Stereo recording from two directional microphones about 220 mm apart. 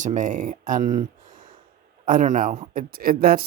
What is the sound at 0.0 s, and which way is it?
Speech, 35° right (ahead or behind).